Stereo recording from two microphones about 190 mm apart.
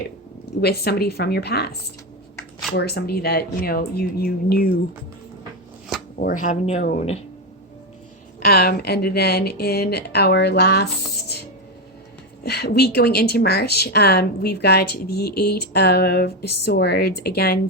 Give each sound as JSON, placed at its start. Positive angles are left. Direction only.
{"t": 0.6, "sound": "speech", "side_deg": 55}
{"t": 2.7, "sound": "speech", "side_deg": 55}
{"t": 6.1, "sound": "speech", "side_deg": 45}
{"t": 8.4, "sound": "speech", "side_deg": 50}
{"t": 12.4, "sound": "speech", "side_deg": 60}